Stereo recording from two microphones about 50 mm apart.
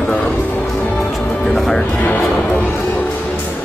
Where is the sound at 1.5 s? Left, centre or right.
Centre.